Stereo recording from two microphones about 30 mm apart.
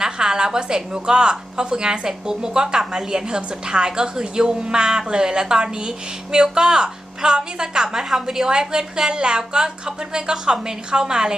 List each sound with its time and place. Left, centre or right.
0.0 s a woman's voice: right
8.1 s a woman's voice: centre
8.4 s a woman's voice: right